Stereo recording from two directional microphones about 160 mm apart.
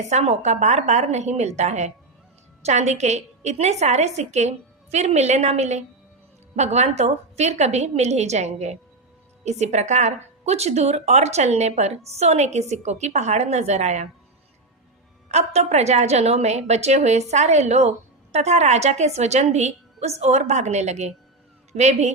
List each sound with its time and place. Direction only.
0.0 s a woman's voice: 45° right (ahead or behind)
15.3 s a woman's voice: 45° right (ahead or behind)